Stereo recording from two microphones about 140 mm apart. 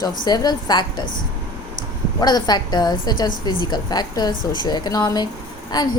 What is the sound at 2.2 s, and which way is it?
A woman's voice, 30° left (ahead or behind).